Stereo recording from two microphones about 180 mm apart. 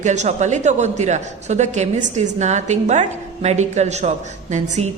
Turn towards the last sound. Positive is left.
turn(degrees=-40)  # may be behind; listen again after turning